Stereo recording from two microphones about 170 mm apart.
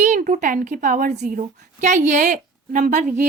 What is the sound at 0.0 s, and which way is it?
A woman's voice, 45° right (ahead or behind).